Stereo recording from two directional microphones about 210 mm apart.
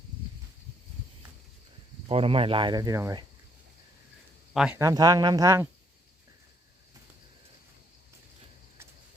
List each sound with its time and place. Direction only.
2.0 s speech: 25° right (ahead or behind)
4.5 s speech: centre (ahead or behind)
4.8 s speech: 15° right (ahead or behind)